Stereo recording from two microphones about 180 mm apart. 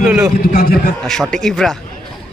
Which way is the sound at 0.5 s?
60° left (ahead or behind).